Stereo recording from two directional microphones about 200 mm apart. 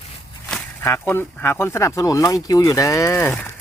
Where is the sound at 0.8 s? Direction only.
10° left (ahead or behind).